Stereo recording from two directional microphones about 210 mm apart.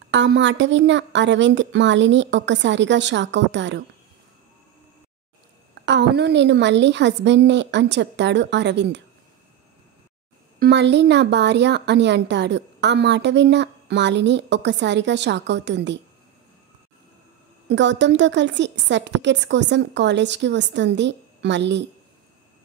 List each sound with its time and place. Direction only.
0.1 s speech: 60° right (ahead or behind)
5.9 s speech: 55° right (ahead or behind)
10.6 s speech: 55° right (ahead or behind)
17.6 s speech: 60° right (ahead or behind)